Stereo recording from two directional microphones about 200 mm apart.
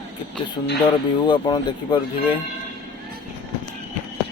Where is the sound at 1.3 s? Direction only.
25° left (ahead or behind).